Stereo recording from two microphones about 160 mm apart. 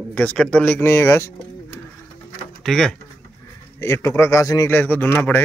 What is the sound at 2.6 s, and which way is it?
Speech, centre (ahead or behind).